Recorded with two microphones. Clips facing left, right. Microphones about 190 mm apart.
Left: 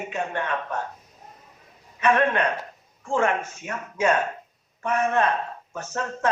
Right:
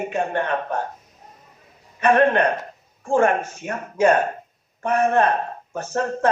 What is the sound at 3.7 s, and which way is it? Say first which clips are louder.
Speech: right 5 dB; 35° right (ahead or behind).